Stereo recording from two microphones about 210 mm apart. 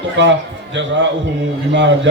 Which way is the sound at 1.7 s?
60° right (ahead or behind).